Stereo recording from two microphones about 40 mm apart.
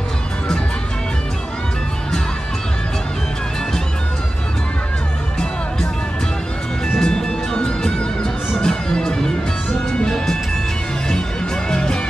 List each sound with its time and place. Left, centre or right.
7.0 s music: centre
11.7 s music: centre